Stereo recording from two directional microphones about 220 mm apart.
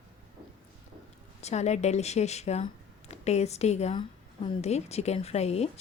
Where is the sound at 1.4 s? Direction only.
30° left (ahead or behind).